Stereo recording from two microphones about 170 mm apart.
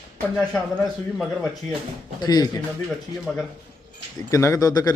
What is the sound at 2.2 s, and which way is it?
Speech, 25° left (ahead or behind).